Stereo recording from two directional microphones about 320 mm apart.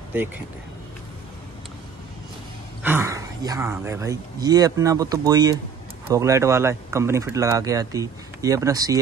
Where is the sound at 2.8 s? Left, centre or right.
Centre.